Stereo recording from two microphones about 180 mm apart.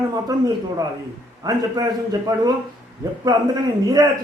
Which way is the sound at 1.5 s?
20° right (ahead or behind).